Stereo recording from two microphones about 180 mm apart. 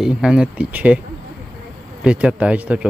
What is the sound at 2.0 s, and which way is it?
Speech, 5° right (ahead or behind).